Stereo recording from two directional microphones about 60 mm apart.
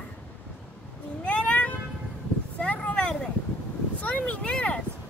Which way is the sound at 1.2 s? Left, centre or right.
Centre.